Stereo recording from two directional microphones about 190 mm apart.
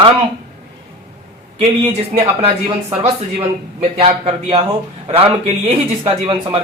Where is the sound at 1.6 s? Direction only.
30° right (ahead or behind).